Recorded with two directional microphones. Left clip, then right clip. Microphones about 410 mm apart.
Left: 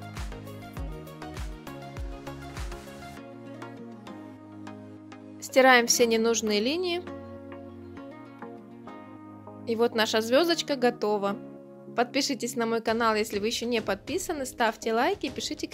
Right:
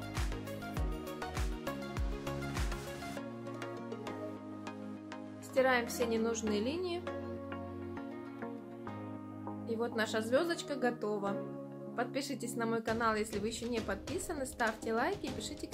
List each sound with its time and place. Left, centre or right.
5.5 s speech: left
9.7 s speech: centre